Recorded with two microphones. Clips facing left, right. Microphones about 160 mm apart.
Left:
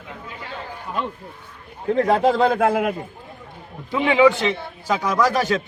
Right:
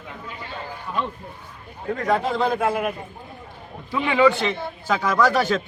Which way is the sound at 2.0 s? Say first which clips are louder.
Left 4 dB; 30° left (ahead or behind).